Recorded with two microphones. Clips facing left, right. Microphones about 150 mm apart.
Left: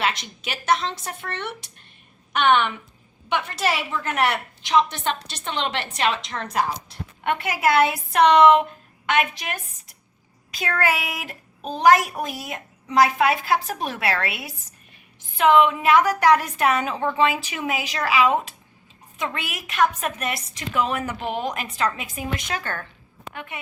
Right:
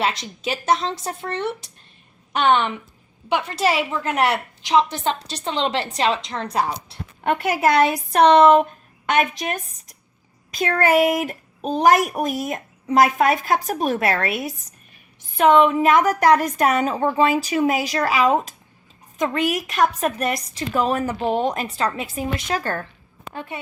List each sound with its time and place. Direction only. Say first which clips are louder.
0.0 s a woman's voice: right 3 dB; 35° right (ahead or behind)